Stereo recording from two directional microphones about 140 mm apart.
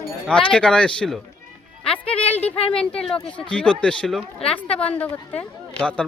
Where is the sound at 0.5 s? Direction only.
5° left (ahead or behind).